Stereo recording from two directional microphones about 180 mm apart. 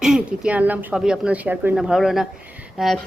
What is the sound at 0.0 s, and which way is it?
A woman's voice, 5° right (ahead or behind).